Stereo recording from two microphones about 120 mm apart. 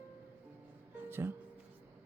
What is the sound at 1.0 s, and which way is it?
Music, 15° right (ahead or behind).